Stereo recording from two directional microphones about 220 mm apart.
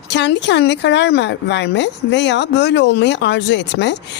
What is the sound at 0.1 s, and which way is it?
A woman's voice, 50° left (ahead or behind).